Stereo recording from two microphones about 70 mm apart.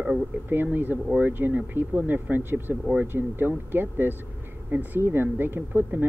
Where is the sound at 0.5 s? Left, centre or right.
Right.